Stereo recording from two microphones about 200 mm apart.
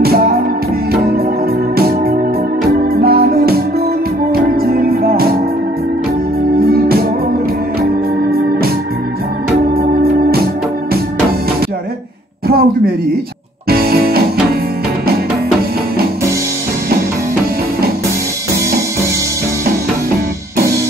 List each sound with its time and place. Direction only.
0.0 s music: 50° right (ahead or behind)
1.8 s organ: 50° right (ahead or behind)
3.0 s music: 50° right (ahead or behind)
6.6 s music: 50° right (ahead or behind)
10.3 s organ: 50° right (ahead or behind)
12.4 s a sound: 45° right (ahead or behind)
13.7 s music: 50° right (ahead or behind)